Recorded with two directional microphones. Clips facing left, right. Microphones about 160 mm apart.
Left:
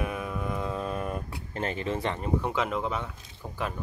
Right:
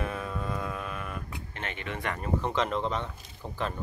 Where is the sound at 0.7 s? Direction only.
35° left (ahead or behind).